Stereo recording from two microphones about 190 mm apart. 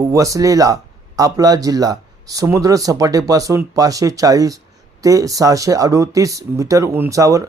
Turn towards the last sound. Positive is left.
turn(degrees=-15)  # may be behind; listen again after turning